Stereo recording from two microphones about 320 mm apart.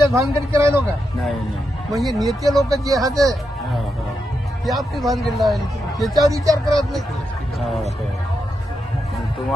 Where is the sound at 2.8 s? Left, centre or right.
Centre.